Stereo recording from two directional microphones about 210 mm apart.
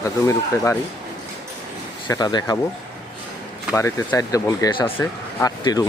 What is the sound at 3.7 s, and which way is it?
Speech, 15° left (ahead or behind).